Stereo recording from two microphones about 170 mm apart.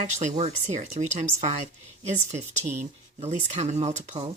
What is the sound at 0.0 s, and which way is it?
A woman's voice, 45° right (ahead or behind).